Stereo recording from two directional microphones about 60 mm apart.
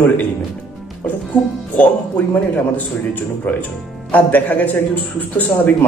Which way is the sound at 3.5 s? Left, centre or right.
Left.